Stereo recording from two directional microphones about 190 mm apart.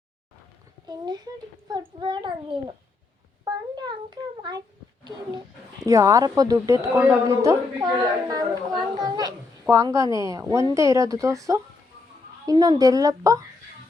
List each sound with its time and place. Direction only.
0.9 s a child's voice: 20° right (ahead or behind)
5.8 s a child's voice: 15° right (ahead or behind)